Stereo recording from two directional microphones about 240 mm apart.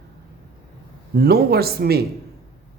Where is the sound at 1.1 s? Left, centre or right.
Right.